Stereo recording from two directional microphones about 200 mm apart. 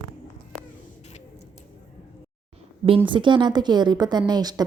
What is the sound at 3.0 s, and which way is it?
A woman's voice, 25° right (ahead or behind).